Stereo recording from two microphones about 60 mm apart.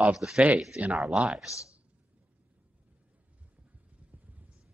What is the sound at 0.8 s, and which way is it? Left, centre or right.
Speech, right.